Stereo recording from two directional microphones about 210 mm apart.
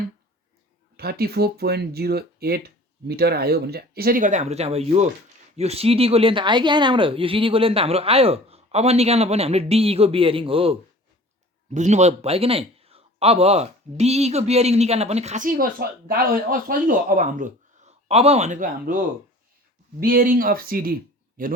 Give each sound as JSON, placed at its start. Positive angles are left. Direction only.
{"t": 0.9, "sound": "a man's voice", "side_deg": -50}
{"t": 20.0, "sound": "a man's voice", "side_deg": -45}